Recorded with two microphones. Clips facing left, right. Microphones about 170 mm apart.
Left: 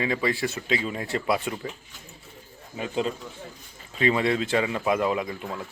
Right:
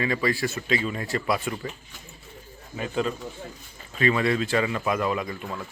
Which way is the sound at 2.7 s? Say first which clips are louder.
Even; 25° left (ahead or behind).